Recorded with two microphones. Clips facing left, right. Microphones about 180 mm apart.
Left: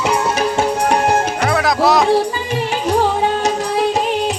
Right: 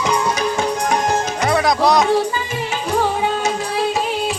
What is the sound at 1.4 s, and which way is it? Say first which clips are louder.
Music: right 2 dB; centre (ahead or behind).